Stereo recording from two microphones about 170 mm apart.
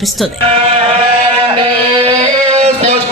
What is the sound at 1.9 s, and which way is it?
Music, 35° right (ahead or behind).